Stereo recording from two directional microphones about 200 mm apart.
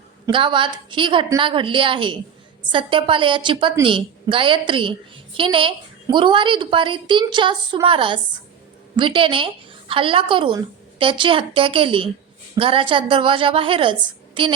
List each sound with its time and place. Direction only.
0.3 s a woman's voice: 25° right (ahead or behind)